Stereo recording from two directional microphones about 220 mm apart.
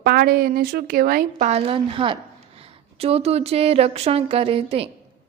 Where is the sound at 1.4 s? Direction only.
25° right (ahead or behind).